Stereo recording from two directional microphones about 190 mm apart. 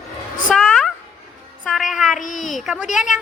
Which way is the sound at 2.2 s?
40° left (ahead or behind).